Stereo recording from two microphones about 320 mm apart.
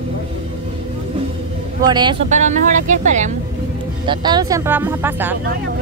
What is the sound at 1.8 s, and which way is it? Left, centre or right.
Speech, centre.